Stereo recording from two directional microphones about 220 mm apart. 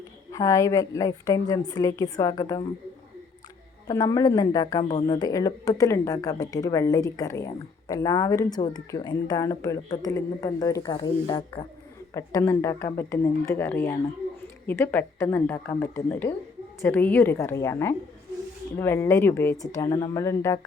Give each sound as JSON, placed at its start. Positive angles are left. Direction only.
{"t": 0.3, "sound": "a woman's voice", "side_deg": 15}
{"t": 3.8, "sound": "a woman's voice", "side_deg": 15}